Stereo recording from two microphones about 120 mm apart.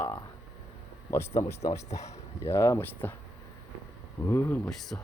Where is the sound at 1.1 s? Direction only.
20° left (ahead or behind).